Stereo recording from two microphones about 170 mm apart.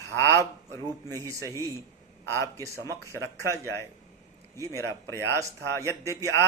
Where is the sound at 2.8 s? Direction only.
15° left (ahead or behind).